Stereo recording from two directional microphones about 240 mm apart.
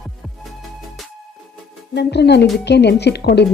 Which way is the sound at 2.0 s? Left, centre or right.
Left.